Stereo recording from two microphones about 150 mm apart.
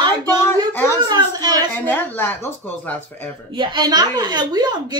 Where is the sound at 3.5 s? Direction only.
30° right (ahead or behind).